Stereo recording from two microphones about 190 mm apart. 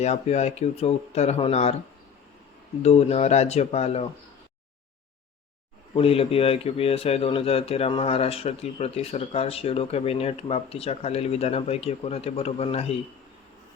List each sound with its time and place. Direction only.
0.0 s speech: 35° left (ahead or behind)
2.8 s speech: 35° left (ahead or behind)
5.9 s speech: 30° left (ahead or behind)